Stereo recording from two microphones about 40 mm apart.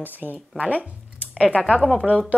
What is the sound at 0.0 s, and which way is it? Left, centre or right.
Speech, right.